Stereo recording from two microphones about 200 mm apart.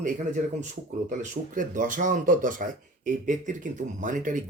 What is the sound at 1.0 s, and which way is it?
Speech, 40° right (ahead or behind).